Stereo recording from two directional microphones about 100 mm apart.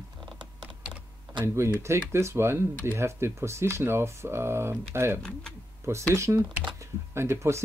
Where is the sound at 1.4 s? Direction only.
30° right (ahead or behind).